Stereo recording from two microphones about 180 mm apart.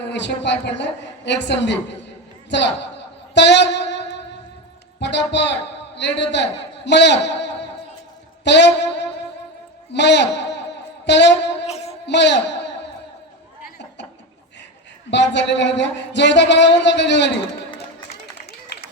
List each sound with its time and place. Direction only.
0.0 s a man's voice: 75° left (ahead or behind)
3.3 s a sound: 75° left (ahead or behind)
4.9 s a man's voice: 75° left (ahead or behind)
11.6 s music: 35° left (ahead or behind)
12.0 s speech: 75° left (ahead or behind)
13.7 s a sound: 70° left (ahead or behind)
15.1 s a man's voice: 75° left (ahead or behind)